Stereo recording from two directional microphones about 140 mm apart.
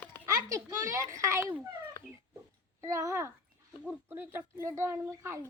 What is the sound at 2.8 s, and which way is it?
Speech, 20° right (ahead or behind).